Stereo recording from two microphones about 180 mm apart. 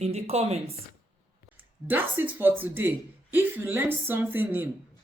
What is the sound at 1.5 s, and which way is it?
Speech, 10° right (ahead or behind).